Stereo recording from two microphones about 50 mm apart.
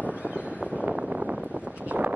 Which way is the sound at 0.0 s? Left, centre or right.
Right.